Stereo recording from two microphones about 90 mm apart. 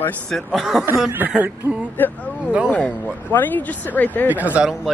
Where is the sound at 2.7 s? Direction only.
15° left (ahead or behind).